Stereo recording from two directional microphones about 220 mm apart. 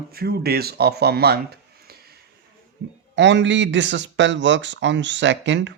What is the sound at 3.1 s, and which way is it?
A man's voice, 55° right (ahead or behind).